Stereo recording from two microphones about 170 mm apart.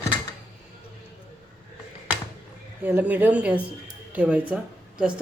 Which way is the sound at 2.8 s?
10° right (ahead or behind).